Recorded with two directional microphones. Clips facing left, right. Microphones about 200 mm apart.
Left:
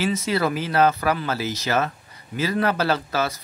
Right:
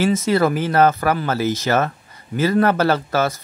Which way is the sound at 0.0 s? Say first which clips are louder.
Right 6 dB; 45° right (ahead or behind).